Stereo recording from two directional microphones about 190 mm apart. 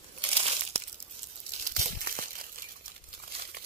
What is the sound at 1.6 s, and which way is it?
Crumpling, 45° right (ahead or behind).